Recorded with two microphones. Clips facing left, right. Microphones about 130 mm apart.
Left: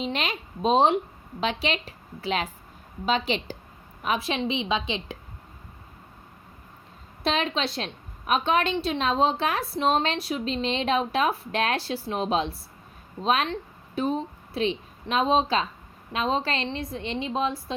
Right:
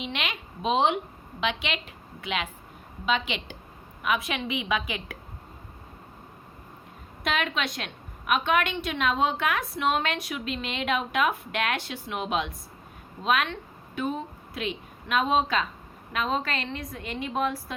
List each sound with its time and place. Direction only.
0.0 s a woman's voice: 35° left (ahead or behind)
7.3 s a woman's voice: 30° left (ahead or behind)